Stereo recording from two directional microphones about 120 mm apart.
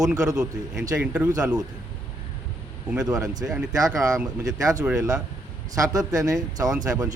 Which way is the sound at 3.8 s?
30° right (ahead or behind).